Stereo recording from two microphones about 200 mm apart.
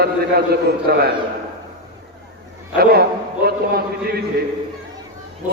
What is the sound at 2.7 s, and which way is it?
A man's voice, 50° right (ahead or behind).